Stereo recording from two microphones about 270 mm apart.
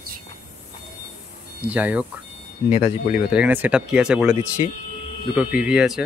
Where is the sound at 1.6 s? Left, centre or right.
Centre.